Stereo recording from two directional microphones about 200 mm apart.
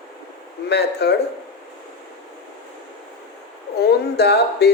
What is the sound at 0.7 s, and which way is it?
Speech, 55° left (ahead or behind).